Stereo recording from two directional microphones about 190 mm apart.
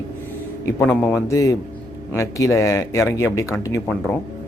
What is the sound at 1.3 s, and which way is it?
A man's voice, 15° left (ahead or behind).